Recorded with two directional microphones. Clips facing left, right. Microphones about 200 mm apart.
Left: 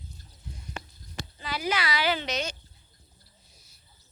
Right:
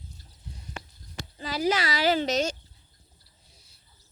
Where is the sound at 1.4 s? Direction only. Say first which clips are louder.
Right 4 dB; 40° right (ahead or behind).